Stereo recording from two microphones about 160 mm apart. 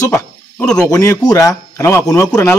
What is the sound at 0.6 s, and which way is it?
Speech, 5° left (ahead or behind).